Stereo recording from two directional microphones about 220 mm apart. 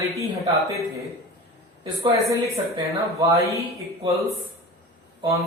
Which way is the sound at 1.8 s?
15° right (ahead or behind).